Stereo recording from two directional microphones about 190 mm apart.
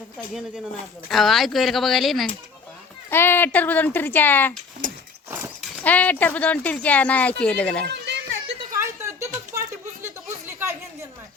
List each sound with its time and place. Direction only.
1.0 s speech: centre (ahead or behind)
3.1 s speech: 10° left (ahead or behind)
5.8 s speech: 10° left (ahead or behind)
7.9 s children playing: 60° right (ahead or behind)
8.7 s a sound: 15° right (ahead or behind)